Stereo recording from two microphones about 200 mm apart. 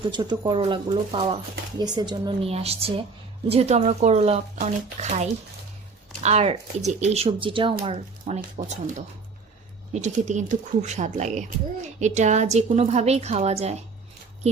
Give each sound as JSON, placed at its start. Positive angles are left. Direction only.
{"t": 0.1, "sound": "a woman's voice", "side_deg": -20}